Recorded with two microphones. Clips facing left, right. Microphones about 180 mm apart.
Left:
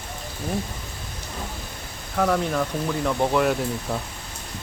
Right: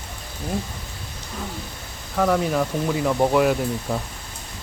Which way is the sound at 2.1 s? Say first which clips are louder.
Right 2 dB; centre (ahead or behind).